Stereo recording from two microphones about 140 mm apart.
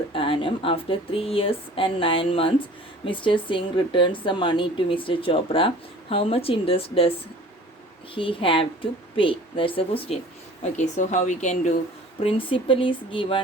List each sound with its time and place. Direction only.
0.1 s speech: 40° left (ahead or behind)
10.6 s a woman's voice: 60° left (ahead or behind)
12.2 s speech: 40° left (ahead or behind)